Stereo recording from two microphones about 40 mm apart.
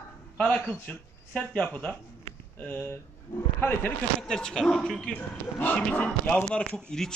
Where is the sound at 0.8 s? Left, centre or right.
Left.